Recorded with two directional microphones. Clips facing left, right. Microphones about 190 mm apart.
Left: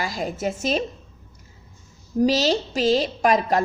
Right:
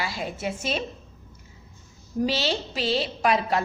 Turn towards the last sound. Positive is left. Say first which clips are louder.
# left 4 dB
turn(degrees=45)  # may be behind; listen again after turning